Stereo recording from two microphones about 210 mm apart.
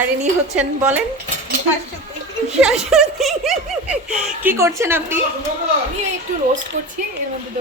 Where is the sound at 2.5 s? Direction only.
Centre (ahead or behind).